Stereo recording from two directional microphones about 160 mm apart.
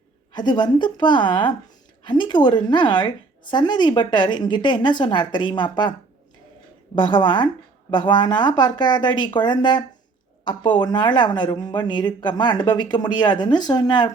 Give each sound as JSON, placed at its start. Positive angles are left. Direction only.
{"t": 0.3, "sound": "speech", "side_deg": 30}
{"t": 6.9, "sound": "speech", "side_deg": 30}